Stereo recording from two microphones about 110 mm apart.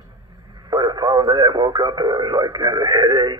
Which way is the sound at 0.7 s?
40° right (ahead or behind).